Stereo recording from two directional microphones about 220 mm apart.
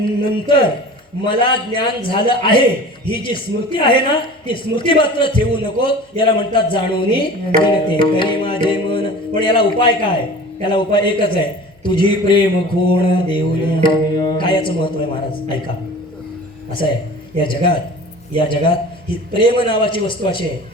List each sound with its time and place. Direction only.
0.0 s a woman's voice: 20° left (ahead or behind)
17.4 s a woman's voice: 20° left (ahead or behind)